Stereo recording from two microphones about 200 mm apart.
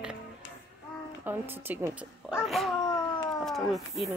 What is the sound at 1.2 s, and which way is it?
Speech, 10° right (ahead or behind).